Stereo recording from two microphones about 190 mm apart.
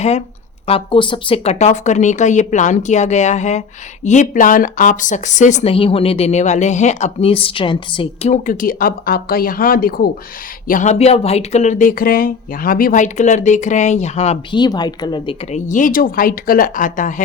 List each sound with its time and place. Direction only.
0.7 s speech: 25° left (ahead or behind)
14.6 s a woman's voice: 20° left (ahead or behind)
15.5 s speech: 40° left (ahead or behind)